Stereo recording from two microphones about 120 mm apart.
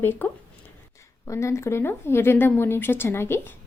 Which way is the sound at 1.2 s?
25° left (ahead or behind).